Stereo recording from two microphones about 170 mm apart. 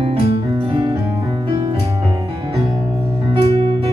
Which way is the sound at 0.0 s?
35° right (ahead or behind).